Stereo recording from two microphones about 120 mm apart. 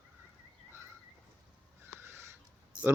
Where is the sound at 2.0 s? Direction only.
20° right (ahead or behind).